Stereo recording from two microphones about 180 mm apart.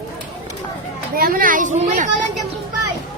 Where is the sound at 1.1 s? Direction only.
55° right (ahead or behind).